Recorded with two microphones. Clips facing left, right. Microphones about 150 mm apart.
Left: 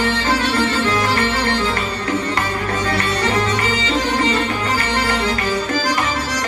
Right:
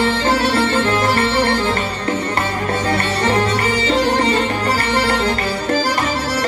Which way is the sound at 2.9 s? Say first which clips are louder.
Right 2 dB; 30° right (ahead or behind).